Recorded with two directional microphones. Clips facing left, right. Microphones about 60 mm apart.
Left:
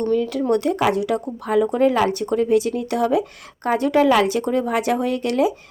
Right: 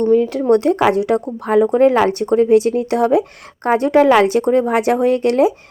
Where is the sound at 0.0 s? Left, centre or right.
Right.